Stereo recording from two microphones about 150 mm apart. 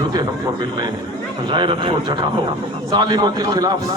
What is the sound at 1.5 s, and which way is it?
A man's voice, 35° right (ahead or behind).